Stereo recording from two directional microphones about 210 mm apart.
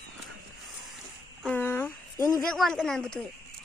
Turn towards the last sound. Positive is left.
turn(degrees=5)  # may be behind; listen again after turning